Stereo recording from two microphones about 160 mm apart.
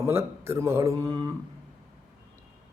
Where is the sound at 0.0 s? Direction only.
15° right (ahead or behind).